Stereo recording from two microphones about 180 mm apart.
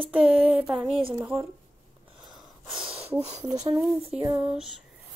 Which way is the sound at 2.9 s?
35° right (ahead or behind).